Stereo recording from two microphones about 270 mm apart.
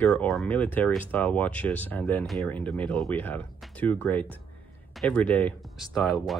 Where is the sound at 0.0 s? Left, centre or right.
Centre.